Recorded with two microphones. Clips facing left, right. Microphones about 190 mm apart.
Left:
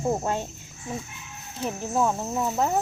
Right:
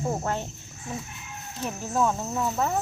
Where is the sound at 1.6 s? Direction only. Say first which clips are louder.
Left 1 dB; 15° left (ahead or behind).